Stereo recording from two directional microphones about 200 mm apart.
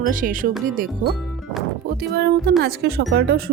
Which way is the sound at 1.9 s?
55° right (ahead or behind).